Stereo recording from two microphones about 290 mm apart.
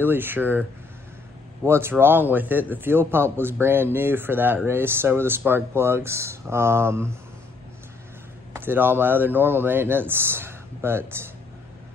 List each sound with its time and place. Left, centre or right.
0.0 s a man's voice: centre
8.5 s a man's voice: centre